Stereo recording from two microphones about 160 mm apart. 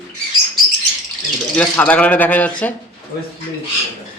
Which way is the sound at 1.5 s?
10° left (ahead or behind).